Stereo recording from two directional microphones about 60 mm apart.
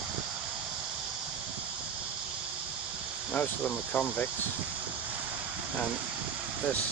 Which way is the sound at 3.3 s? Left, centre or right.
Left.